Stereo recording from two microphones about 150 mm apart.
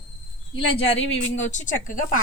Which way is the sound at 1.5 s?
60° left (ahead or behind).